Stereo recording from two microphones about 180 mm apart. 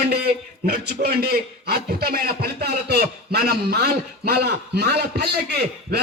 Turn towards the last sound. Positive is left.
turn(degrees=-65)  # may be behind; listen again after turning